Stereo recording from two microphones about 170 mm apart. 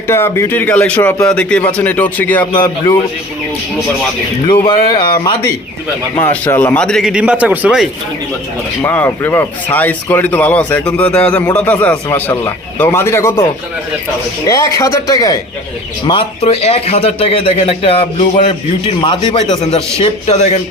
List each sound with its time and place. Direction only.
0.1 s speech: 15° left (ahead or behind)
2.5 s speech: 25° left (ahead or behind)
4.6 s speech: 30° left (ahead or behind)
6.2 s speech: 10° left (ahead or behind); by 7.9 s 5° right (ahead or behind)
8.8 s speech: 15° left (ahead or behind)
14.4 s speech: 20° left (ahead or behind)
16.0 s a man's voice: 30° left (ahead or behind)